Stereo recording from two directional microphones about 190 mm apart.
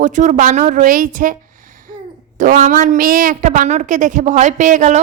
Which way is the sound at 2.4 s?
40° right (ahead or behind).